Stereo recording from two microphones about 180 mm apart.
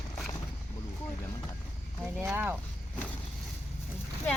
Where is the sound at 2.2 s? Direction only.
10° right (ahead or behind).